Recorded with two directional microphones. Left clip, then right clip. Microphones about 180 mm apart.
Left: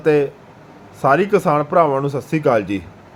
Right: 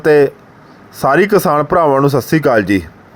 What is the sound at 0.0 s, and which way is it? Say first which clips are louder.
Speech: right 6 dB; 55° right (ahead or behind).